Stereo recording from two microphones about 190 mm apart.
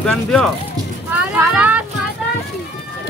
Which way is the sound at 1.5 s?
10° right (ahead or behind).